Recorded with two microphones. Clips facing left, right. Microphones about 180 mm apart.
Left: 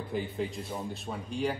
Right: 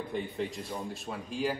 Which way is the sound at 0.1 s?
Centre (ahead or behind).